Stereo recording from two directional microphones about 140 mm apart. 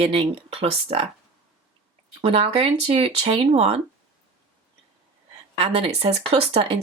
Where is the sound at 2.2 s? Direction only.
40° right (ahead or behind).